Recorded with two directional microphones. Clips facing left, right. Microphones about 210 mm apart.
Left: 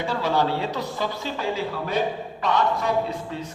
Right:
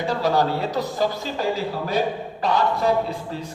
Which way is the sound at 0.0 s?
40° right (ahead or behind).